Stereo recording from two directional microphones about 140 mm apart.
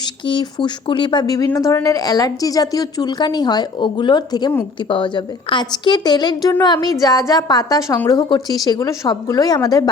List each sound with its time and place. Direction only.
0.0 s a woman's voice: 35° left (ahead or behind)